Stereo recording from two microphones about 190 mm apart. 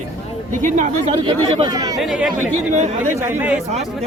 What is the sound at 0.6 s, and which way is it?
Speech, 40° right (ahead or behind).